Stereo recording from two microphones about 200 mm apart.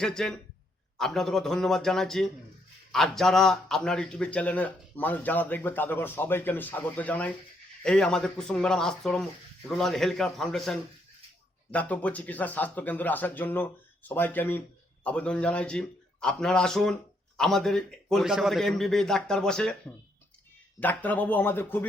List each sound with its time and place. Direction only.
0.0 s a man's voice: 5° left (ahead or behind)
20.7 s a man's voice: 10° left (ahead or behind)